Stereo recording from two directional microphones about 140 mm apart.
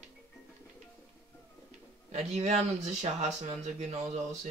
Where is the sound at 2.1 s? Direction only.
50° right (ahead or behind).